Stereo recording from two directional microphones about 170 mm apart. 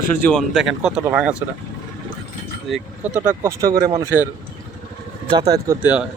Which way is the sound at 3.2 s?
15° right (ahead or behind).